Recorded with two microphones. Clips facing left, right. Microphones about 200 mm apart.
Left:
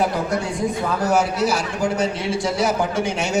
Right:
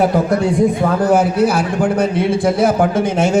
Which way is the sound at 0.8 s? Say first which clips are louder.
Right 6 dB; 55° right (ahead or behind).